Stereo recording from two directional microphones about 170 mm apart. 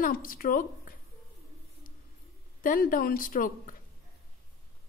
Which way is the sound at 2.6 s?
55° left (ahead or behind).